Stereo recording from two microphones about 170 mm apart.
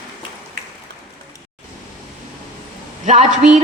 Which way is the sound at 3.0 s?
45° right (ahead or behind).